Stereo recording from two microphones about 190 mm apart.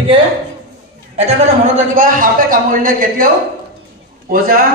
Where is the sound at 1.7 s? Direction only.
45° right (ahead or behind).